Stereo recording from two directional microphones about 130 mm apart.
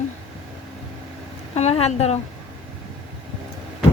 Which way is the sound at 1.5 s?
55° left (ahead or behind).